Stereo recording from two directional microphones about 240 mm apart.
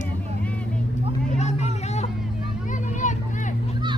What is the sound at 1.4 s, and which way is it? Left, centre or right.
Vehicle, left.